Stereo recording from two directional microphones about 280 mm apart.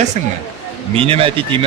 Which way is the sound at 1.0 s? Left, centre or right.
Centre.